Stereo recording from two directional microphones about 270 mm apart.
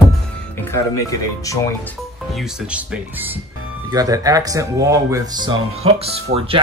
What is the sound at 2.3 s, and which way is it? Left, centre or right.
Speech, centre.